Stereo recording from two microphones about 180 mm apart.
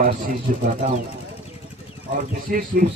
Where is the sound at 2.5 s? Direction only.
50° right (ahead or behind).